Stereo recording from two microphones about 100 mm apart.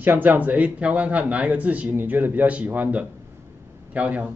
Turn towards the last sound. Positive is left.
turn(degrees=-15)  # may be behind; listen again after turning